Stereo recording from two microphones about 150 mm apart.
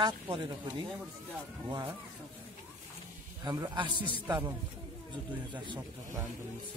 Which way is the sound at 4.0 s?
35° left (ahead or behind).